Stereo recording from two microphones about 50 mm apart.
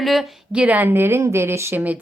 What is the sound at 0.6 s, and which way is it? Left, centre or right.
Speech, right.